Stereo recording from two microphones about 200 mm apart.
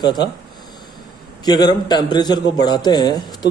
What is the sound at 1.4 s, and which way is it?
Speech, 20° left (ahead or behind).